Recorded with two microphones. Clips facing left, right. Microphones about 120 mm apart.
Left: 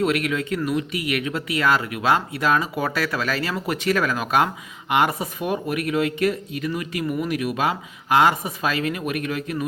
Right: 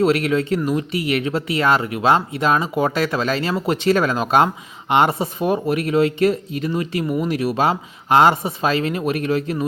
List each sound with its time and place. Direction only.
0.0 s speech: 30° right (ahead or behind)